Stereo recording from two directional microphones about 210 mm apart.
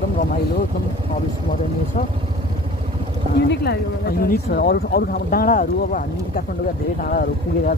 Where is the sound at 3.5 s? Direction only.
50° left (ahead or behind).